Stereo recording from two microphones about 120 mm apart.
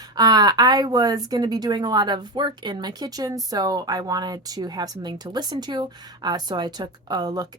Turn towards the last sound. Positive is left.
turn(degrees=-35)  # may be behind; listen again after turning